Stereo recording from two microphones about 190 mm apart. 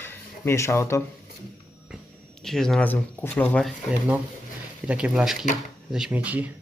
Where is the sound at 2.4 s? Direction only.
Centre (ahead or behind).